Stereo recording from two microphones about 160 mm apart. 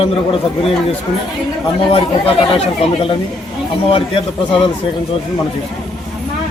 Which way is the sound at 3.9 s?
35° left (ahead or behind).